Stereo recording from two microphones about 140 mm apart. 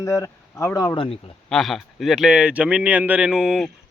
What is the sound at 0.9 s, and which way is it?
Speech, 40° left (ahead or behind).